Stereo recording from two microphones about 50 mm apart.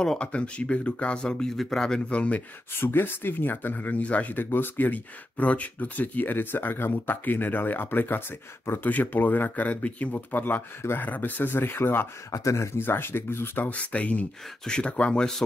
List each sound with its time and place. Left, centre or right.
0.2 s speech: left
2.8 s speech: left
12.3 s speech: left
12.7 s speech: left
13.6 s speech: left
14.6 s speech: centre